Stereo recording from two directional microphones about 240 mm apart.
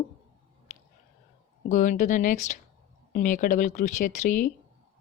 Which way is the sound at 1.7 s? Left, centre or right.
Left.